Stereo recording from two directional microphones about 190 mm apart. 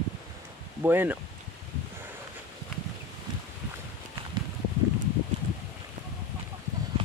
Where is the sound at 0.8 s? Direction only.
10° right (ahead or behind).